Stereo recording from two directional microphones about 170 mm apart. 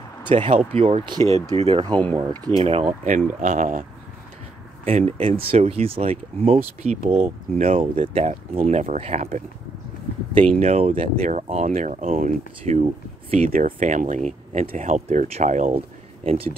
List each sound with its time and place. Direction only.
0.4 s speech: 35° right (ahead or behind)
2.1 s speech: 25° right (ahead or behind)
2.6 s speech: 35° right (ahead or behind)
4.8 s speech: 40° right (ahead or behind)
13.5 s speech: 50° right (ahead or behind)
16.3 s speech: 35° right (ahead or behind)